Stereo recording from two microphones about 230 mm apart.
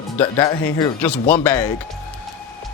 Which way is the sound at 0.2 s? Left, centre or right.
Centre.